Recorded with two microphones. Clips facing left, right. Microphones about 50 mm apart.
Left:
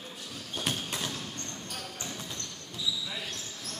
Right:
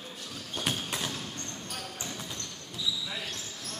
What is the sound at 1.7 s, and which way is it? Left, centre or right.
Basketball bounce, centre.